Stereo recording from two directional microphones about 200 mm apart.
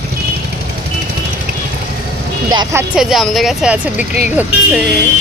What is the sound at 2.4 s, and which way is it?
Speech, 20° right (ahead or behind).